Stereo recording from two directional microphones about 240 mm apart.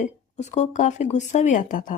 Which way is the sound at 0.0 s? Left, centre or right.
Left.